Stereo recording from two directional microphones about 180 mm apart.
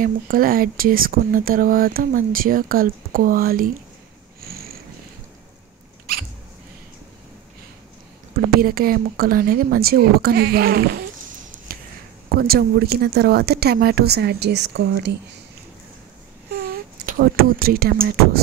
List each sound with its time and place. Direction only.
0.0 s speech: 55° right (ahead or behind)
8.5 s speech: 55° right (ahead or behind)
12.4 s speech: 60° right (ahead or behind)
16.7 s speech: 55° right (ahead or behind)